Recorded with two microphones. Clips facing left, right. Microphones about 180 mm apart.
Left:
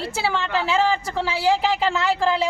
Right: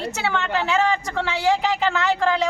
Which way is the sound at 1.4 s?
30° left (ahead or behind).